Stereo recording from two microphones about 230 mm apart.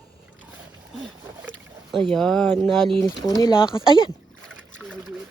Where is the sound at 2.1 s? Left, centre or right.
Centre.